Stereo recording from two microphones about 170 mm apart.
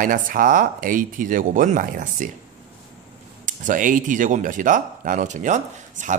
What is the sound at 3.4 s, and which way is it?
Speech, 50° right (ahead or behind).